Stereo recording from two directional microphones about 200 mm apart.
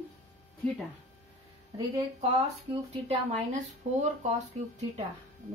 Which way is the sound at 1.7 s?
25° right (ahead or behind).